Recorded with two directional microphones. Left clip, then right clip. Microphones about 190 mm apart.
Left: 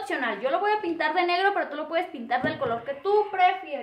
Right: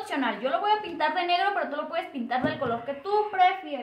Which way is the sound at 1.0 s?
35° left (ahead or behind).